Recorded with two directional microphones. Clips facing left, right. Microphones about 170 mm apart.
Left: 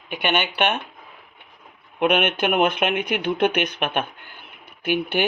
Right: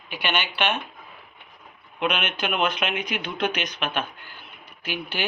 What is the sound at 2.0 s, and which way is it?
Speech, 55° left (ahead or behind).